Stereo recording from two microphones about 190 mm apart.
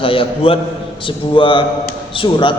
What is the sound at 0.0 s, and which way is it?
A man's voice, 30° left (ahead or behind).